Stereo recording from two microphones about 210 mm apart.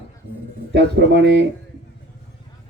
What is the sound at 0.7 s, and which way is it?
Speech, 55° right (ahead or behind).